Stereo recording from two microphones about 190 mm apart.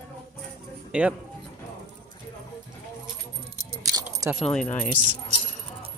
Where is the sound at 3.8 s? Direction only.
15° right (ahead or behind).